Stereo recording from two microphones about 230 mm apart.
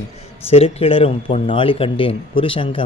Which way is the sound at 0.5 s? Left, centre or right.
Left.